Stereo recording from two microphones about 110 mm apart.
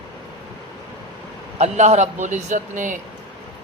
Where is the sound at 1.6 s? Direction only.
90° right.